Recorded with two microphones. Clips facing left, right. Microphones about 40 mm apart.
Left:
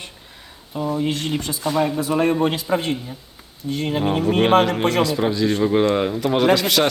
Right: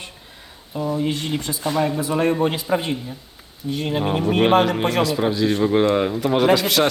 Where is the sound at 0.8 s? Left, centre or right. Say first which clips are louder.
Even; centre.